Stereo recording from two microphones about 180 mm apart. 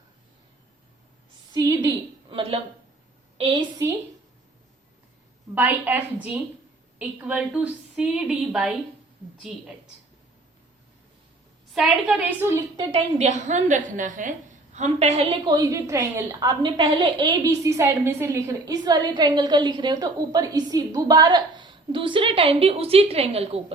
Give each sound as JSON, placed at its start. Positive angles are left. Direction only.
{"t": 1.5, "sound": "a sound", "side_deg": -20}
{"t": 2.3, "sound": "a woman's voice", "side_deg": -30}
{"t": 5.5, "sound": "a woman's voice", "side_deg": -10}
{"t": 11.7, "sound": "a woman's voice", "side_deg": -5}
{"t": 12.9, "sound": "a woman's voice", "side_deg": -35}
{"t": 15.4, "sound": "a woman's voice", "side_deg": -20}